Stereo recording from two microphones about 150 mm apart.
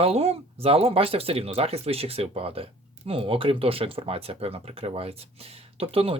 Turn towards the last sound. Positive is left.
turn(degrees=-40)  # may be behind; listen again after turning